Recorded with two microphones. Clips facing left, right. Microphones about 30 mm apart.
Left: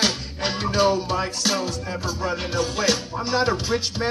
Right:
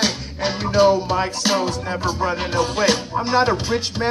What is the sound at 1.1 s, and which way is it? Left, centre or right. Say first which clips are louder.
Music: right 4 dB; centre.